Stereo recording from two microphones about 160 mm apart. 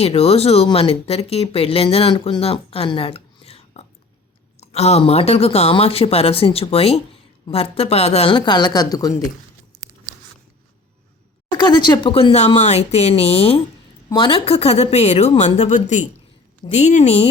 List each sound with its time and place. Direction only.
0.0 s speech: 40° left (ahead or behind); by 9.1 s 25° left (ahead or behind)
11.5 s a woman's voice: 25° left (ahead or behind); by 17.2 s 45° left (ahead or behind)